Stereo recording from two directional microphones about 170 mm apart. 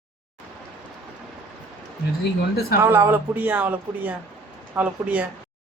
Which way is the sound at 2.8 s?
15° right (ahead or behind).